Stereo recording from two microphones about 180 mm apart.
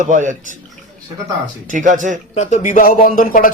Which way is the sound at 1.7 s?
45° right (ahead or behind).